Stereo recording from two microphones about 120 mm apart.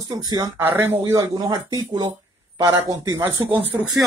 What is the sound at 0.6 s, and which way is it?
Speech, 20° right (ahead or behind).